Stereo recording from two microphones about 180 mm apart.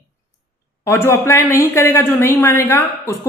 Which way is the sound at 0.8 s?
15° left (ahead or behind).